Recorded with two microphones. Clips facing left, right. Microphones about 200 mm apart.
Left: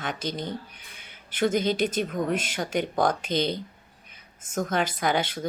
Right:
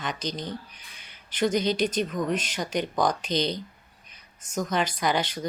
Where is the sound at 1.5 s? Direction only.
50° left (ahead or behind).